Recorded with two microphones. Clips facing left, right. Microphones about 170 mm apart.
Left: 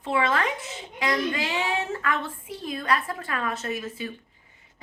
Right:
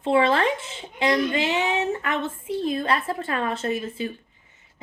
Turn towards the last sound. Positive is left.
turn(degrees=-25)  # may be behind; listen again after turning